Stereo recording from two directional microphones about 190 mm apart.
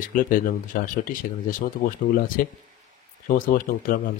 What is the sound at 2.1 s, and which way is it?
Speech, 45° left (ahead or behind).